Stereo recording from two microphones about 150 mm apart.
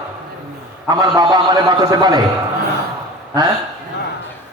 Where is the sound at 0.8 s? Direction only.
25° right (ahead or behind).